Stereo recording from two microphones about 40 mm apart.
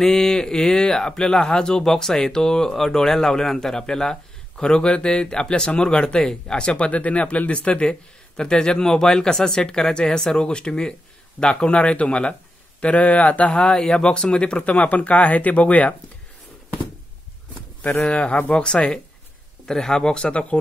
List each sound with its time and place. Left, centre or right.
0.0 s speech: centre; by 15.9 s left
18.0 s speech: left
19.6 s speech: centre
20.2 s speech: left